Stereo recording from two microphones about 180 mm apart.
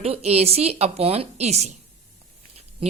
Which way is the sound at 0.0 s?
35° right (ahead or behind).